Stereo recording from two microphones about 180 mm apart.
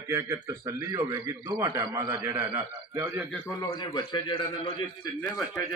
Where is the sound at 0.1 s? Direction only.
15° right (ahead or behind).